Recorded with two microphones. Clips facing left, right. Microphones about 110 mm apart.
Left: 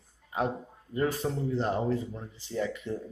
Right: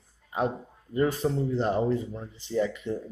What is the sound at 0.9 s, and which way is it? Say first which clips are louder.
Speech: right 4 dB; centre (ahead or behind).